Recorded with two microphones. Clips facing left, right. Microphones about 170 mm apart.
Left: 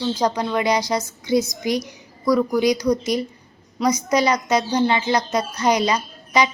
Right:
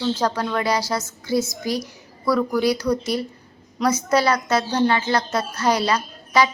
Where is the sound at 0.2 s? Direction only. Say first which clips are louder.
Left 2 dB; 15° left (ahead or behind).